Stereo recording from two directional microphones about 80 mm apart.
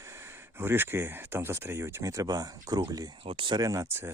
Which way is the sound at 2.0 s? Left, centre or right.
Right.